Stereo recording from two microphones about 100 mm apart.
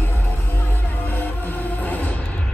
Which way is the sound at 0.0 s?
20° left (ahead or behind).